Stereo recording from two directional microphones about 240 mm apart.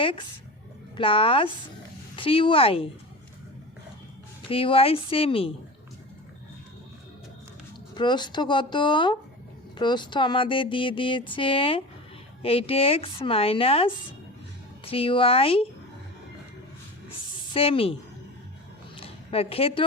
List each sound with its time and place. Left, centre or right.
0.9 s speech: left
4.4 s speech: left
7.9 s speech: centre
17.5 s speech: left
18.9 s a sound: left